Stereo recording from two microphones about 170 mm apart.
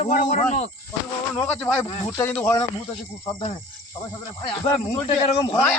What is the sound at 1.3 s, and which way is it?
A man's voice, 10° left (ahead or behind).